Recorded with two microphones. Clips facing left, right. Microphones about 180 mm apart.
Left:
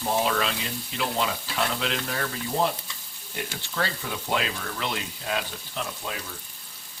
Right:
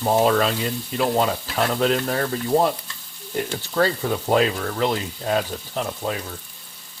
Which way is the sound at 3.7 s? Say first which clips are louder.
Right 10 dB; 45° right (ahead or behind).